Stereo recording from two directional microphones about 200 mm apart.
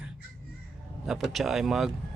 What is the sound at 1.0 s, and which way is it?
Speech, centre (ahead or behind).